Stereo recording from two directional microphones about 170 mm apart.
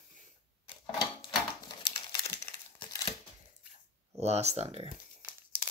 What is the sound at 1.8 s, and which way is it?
Crumpling, 25° left (ahead or behind).